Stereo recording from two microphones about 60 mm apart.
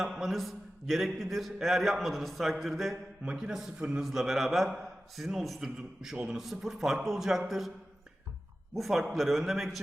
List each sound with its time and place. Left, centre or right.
0.0 s a man's voice: centre
3.2 s a man's voice: centre
8.7 s a man's voice: centre